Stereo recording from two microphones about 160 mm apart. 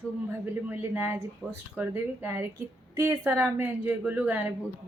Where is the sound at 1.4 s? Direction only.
Centre (ahead or behind).